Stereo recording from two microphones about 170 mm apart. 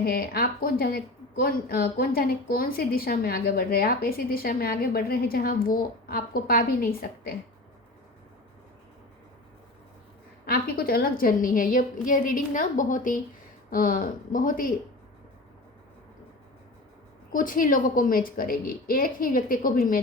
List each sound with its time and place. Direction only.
0.0 s a woman's voice: 60° left (ahead or behind)
10.5 s a woman's voice: 60° left (ahead or behind)
17.3 s a woman's voice: 55° left (ahead or behind)